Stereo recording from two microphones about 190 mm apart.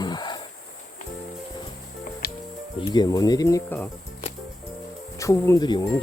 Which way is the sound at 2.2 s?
55° left (ahead or behind).